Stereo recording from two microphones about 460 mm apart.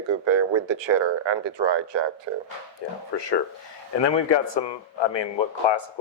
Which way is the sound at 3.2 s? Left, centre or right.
Left.